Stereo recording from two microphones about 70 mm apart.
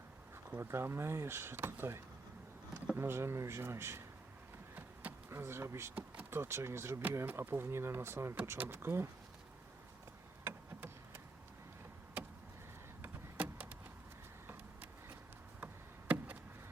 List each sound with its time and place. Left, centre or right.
0.6 s speech: right
5.3 s speech: right
5.9 s speech: right
6.3 s speech: right
10.4 s a sound: right
13.0 s vehicle: right
15.6 s a sound: right